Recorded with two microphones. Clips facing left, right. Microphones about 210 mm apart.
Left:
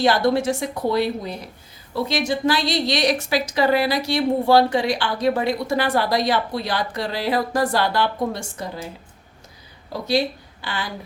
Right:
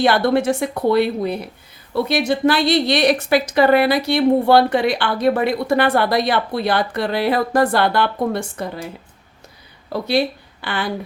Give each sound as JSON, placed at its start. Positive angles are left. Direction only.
{"t": 0.0, "sound": "a woman's voice", "side_deg": -60}
{"t": 9.9, "sound": "speech", "side_deg": -60}